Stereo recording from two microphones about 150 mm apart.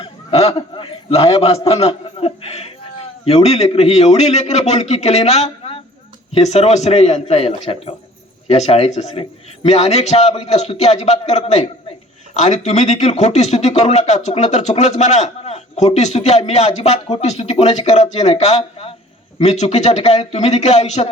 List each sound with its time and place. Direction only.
0.0 s a man's voice: 40° left (ahead or behind)